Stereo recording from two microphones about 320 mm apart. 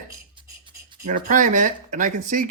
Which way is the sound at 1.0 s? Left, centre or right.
Right.